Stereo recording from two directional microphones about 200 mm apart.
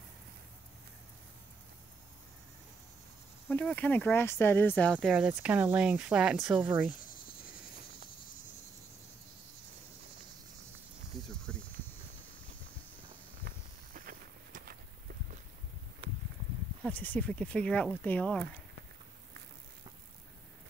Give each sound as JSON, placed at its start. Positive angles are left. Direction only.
{"t": 3.4, "sound": "speech", "side_deg": 10}
{"t": 4.9, "sound": "speech", "side_deg": -10}
{"t": 11.1, "sound": "cricket", "side_deg": 0}
{"t": 13.9, "sound": "walk", "side_deg": -45}
{"t": 16.8, "sound": "speech", "side_deg": 10}